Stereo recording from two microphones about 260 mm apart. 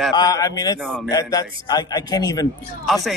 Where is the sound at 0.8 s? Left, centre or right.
Centre.